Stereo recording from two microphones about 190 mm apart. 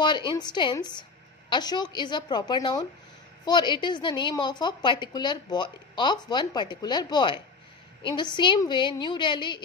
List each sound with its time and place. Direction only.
0.0 s a woman's voice: 25° left (ahead or behind)